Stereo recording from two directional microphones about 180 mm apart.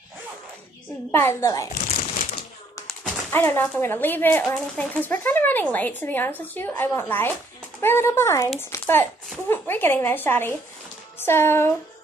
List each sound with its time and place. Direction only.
1.1 s speech: 15° left (ahead or behind)
1.9 s shuffling cards: 35° left (ahead or behind)
3.3 s speech: 10° left (ahead or behind)